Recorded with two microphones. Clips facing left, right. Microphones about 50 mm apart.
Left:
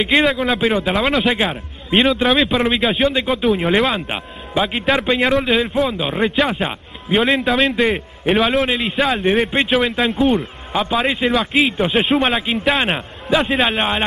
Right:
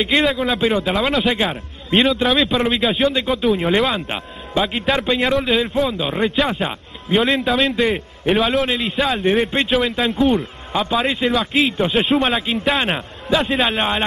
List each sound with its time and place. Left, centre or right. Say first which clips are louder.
0.0 s a man's voice: left 2 dB; centre
10.1 s speech: right 1 dB; left
10.7 s a man's voice: left 1 dB; centre